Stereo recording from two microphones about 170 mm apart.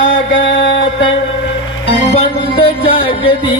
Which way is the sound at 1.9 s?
35° left (ahead or behind).